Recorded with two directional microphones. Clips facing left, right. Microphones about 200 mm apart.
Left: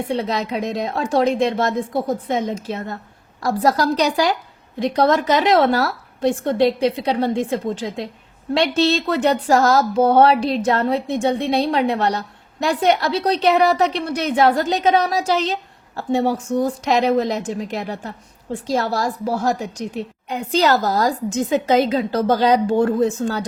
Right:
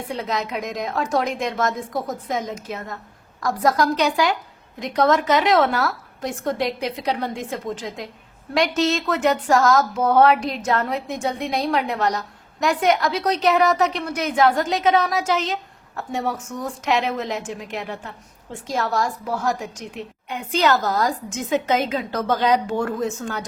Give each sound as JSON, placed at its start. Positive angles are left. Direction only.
{"t": 0.0, "sound": "speech", "side_deg": 30}